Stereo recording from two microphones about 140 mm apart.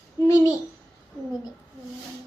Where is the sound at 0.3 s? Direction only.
25° left (ahead or behind).